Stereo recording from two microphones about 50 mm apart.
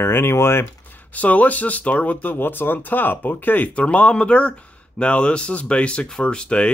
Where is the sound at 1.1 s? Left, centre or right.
Left.